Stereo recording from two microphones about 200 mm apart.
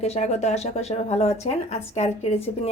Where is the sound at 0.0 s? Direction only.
35° left (ahead or behind).